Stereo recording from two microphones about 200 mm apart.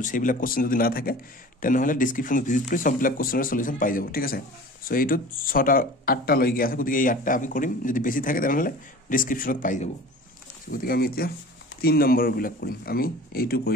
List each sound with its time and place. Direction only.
0.0 s speech: 40° left (ahead or behind)